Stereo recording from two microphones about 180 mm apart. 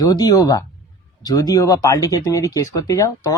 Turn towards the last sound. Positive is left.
turn(degrees=20)  # may be behind; listen again after turning